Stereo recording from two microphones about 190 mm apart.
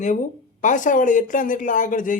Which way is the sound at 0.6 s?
40° left (ahead or behind).